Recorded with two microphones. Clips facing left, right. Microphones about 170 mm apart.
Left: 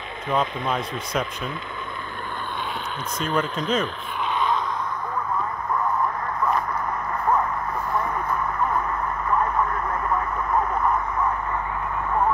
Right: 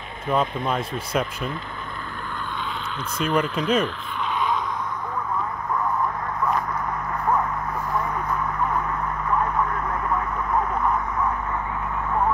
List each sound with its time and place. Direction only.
0.3 s speech: 5° right (ahead or behind)
3.2 s speech: 10° right (ahead or behind)
7.9 s vehicle: centre (ahead or behind)